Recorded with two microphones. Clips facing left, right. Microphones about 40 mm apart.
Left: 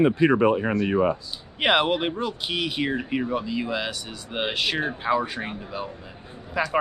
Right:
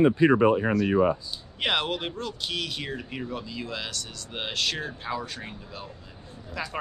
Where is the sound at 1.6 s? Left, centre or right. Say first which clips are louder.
Left 6 dB; centre.